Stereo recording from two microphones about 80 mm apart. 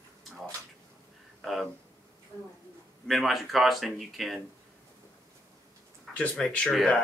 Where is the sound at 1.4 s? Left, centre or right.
Centre.